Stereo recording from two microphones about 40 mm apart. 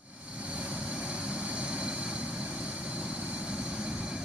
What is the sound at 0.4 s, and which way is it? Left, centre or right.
Vehicle, right.